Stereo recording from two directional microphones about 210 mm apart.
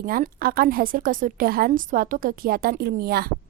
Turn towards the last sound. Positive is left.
turn(degrees=-45)  # may be behind; listen again after turning